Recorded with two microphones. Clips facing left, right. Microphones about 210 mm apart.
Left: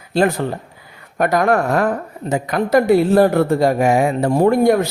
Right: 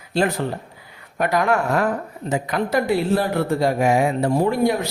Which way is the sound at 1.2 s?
45° left (ahead or behind).